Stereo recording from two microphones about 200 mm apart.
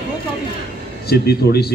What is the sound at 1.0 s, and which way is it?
Speech, 50° left (ahead or behind).